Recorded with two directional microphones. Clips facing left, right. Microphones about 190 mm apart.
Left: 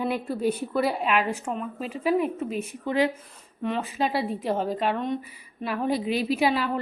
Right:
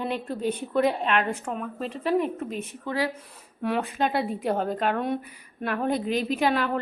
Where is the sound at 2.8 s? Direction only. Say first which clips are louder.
Left 4 dB; 20° left (ahead or behind).